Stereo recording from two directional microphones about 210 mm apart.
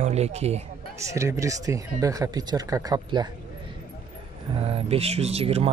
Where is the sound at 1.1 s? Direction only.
15° right (ahead or behind).